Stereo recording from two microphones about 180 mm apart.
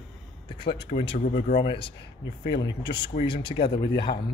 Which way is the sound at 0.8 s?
40° left (ahead or behind).